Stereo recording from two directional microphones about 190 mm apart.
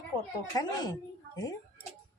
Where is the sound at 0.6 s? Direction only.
20° left (ahead or behind).